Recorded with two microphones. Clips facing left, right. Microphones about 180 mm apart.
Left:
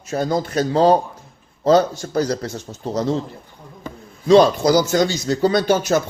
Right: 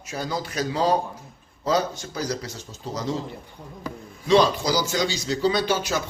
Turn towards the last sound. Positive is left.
turn(degrees=45)  # may be behind; listen again after turning